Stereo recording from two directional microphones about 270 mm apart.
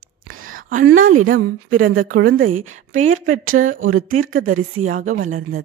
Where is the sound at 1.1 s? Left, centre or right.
Right.